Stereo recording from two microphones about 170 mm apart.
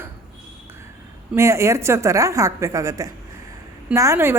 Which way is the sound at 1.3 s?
15° right (ahead or behind).